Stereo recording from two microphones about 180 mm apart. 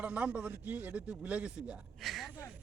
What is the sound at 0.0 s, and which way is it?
Speech, 10° right (ahead or behind).